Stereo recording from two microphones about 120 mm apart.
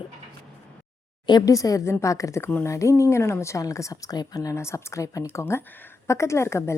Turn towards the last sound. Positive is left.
turn(degrees=20)  # may be behind; listen again after turning